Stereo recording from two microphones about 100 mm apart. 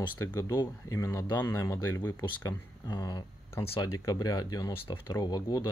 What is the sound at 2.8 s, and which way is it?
Speech, 45° left (ahead or behind).